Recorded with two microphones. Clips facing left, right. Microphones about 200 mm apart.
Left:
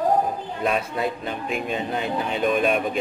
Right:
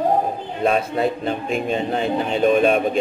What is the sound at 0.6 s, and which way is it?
A man's voice, 35° right (ahead or behind).